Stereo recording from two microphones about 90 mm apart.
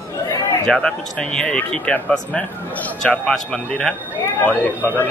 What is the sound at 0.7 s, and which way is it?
Speech, 5° left (ahead or behind).